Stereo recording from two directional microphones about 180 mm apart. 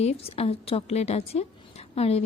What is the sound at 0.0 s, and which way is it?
A woman's voice, 35° left (ahead or behind).